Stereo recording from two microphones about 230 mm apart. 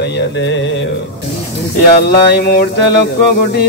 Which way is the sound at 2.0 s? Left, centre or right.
Left.